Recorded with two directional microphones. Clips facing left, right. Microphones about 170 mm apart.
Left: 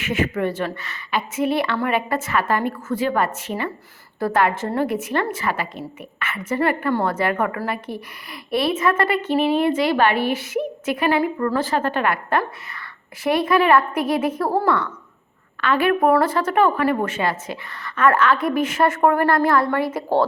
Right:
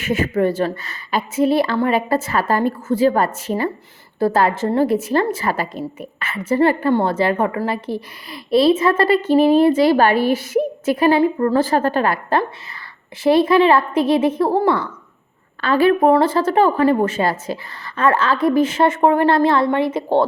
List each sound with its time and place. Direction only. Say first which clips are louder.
0.0 s a woman's voice: right 4 dB; 35° right (ahead or behind)